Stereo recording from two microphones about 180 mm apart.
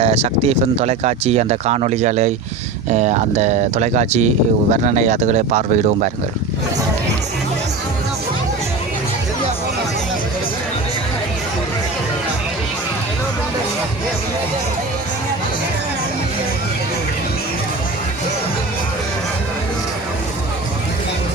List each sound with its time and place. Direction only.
0.0 s speech: 35° right (ahead or behind)